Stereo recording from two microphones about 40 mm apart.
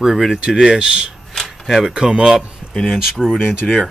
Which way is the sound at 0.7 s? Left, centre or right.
Right.